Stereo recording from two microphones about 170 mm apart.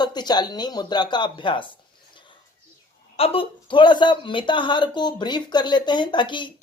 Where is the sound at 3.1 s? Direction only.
35° left (ahead or behind).